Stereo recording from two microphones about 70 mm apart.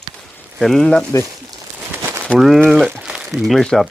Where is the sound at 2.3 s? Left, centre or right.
Centre.